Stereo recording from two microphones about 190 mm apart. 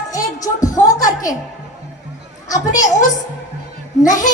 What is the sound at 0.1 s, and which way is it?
Music, 20° left (ahead or behind).